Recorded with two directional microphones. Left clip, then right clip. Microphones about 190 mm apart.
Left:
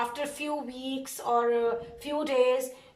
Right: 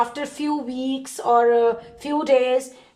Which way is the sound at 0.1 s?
40° right (ahead or behind).